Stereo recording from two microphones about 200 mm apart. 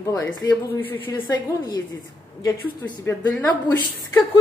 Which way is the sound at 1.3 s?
20° left (ahead or behind).